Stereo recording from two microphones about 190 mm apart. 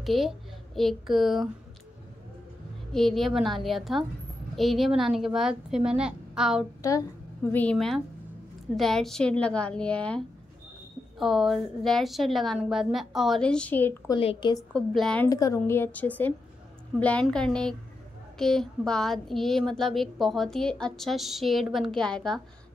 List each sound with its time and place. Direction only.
0.0 s a child's voice: centre (ahead or behind)
2.9 s speech: centre (ahead or behind)
6.8 s a woman's voice: 15° left (ahead or behind)
7.5 s speech: 5° left (ahead or behind)
14.1 s a woman's voice: 25° left (ahead or behind)
14.7 s speech: 5° left (ahead or behind)
15.2 s a woman's voice: 15° left (ahead or behind)